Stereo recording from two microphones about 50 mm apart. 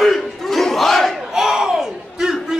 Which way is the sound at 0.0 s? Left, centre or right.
Centre.